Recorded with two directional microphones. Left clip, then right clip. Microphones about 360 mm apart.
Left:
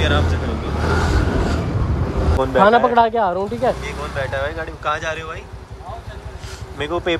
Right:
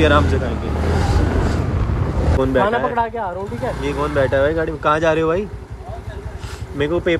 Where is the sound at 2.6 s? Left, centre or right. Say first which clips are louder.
Left 5 dB; left.